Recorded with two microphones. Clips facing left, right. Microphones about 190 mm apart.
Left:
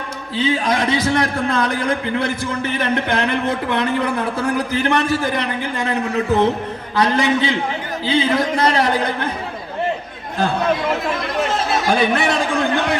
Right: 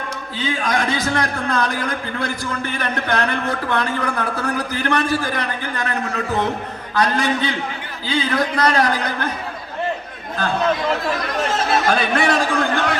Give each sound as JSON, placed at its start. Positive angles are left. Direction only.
{"t": 0.3, "sound": "a man's voice", "side_deg": 30}
{"t": 11.9, "sound": "a man's voice", "side_deg": 20}